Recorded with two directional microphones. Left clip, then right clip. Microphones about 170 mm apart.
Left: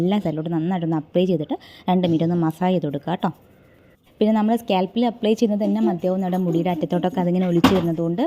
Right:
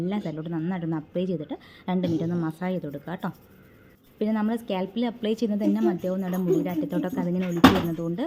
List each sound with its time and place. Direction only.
0.0 s a woman's voice: 35° left (ahead or behind)
7.9 s a woman's voice: 20° left (ahead or behind)